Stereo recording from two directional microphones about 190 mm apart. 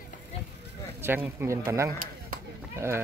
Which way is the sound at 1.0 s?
10° right (ahead or behind).